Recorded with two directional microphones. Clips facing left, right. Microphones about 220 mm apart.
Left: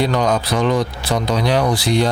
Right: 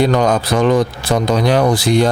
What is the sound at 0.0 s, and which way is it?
Speech, 50° right (ahead or behind).